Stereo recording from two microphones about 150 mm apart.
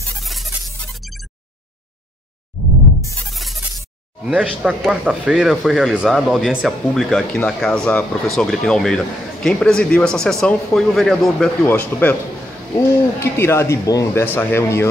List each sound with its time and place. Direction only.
0.2 s music: centre (ahead or behind)
3.3 s speech: centre (ahead or behind)
13.2 s speech: 15° left (ahead or behind)